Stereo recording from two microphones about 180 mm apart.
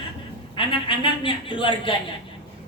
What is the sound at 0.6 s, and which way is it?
A woman's voice, 30° left (ahead or behind).